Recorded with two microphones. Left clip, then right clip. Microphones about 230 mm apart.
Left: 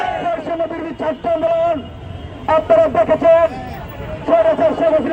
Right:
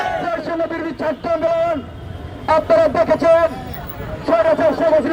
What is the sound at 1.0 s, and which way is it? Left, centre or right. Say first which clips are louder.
Speech: left 3 dB; right.